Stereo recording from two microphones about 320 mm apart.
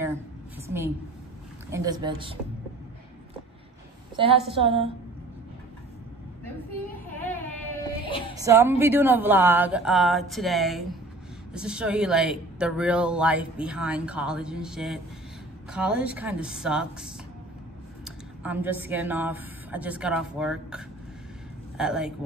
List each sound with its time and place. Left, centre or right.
0.7 s a woman's voice: centre
4.2 s a woman's voice: centre
7.2 s a sound: centre
8.4 s a woman's voice: centre